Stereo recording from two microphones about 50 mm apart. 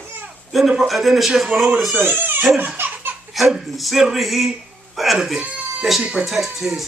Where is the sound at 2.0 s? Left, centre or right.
Right.